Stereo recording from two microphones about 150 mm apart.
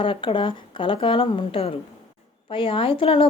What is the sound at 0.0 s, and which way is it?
A woman's voice, 35° left (ahead or behind).